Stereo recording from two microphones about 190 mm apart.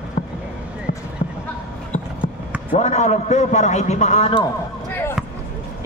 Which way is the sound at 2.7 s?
35° left (ahead or behind).